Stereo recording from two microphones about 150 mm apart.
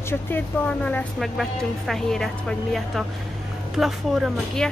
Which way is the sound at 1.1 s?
Centre (ahead or behind).